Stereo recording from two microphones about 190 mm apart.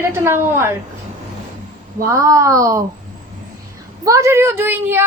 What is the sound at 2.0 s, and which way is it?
Speech, 15° right (ahead or behind).